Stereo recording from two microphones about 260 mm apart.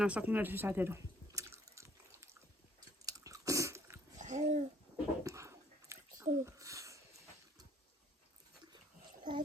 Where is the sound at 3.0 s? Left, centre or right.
Centre.